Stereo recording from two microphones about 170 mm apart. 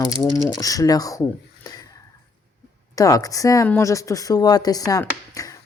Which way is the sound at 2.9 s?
20° left (ahead or behind).